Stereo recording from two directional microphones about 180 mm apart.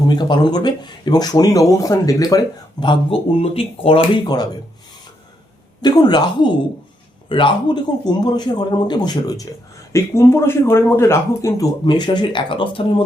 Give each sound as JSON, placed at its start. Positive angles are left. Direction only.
{"t": 0.1, "sound": "speech", "side_deg": 25}
{"t": 5.8, "sound": "speech", "side_deg": 25}